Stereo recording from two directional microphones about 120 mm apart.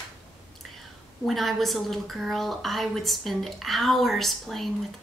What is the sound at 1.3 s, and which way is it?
A woman's voice, centre (ahead or behind).